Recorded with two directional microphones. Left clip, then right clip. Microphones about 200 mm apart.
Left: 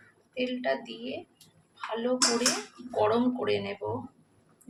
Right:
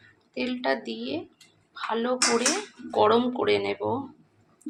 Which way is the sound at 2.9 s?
20° right (ahead or behind).